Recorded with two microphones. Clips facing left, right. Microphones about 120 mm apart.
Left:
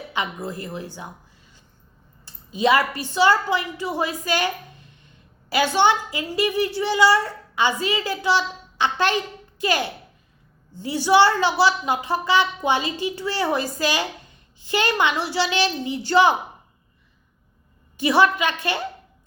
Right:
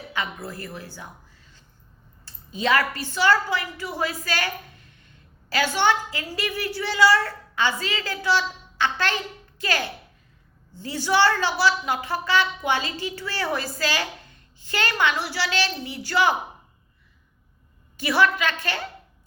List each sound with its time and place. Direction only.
0.4 s a woman's voice: 15° left (ahead or behind)
2.2 s a woman's voice: 15° left (ahead or behind)
17.9 s a woman's voice: 15° left (ahead or behind)